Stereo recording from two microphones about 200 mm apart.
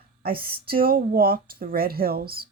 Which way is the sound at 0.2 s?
50° right (ahead or behind).